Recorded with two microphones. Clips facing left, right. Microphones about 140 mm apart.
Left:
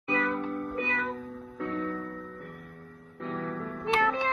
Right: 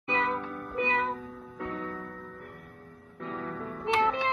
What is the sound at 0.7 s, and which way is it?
Music, 25° right (ahead or behind).